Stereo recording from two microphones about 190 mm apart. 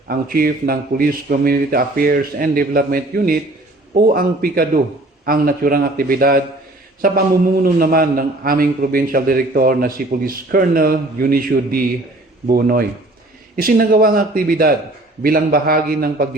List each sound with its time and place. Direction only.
0.1 s a man's voice: 50° right (ahead or behind)